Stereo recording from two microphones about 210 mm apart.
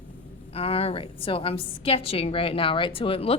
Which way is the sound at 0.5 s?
25° left (ahead or behind).